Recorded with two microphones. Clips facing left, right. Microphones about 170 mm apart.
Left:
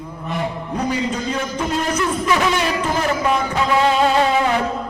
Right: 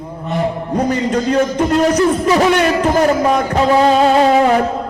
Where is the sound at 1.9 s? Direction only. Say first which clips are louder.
Right 7 dB; 35° right (ahead or behind).